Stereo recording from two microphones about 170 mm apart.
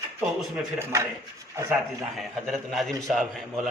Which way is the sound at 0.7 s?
15° right (ahead or behind).